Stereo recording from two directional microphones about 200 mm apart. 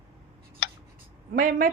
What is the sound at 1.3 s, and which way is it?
Speech, 45° right (ahead or behind).